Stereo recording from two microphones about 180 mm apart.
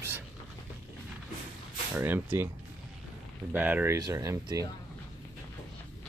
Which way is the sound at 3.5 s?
10° right (ahead or behind).